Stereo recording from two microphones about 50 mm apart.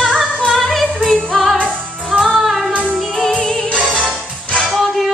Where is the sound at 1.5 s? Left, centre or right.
Right.